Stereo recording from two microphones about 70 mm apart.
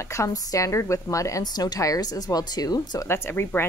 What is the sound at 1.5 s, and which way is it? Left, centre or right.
A woman's voice, left.